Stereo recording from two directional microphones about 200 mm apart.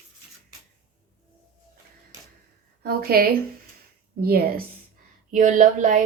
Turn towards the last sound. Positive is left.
turn(degrees=-40)  # may be behind; listen again after turning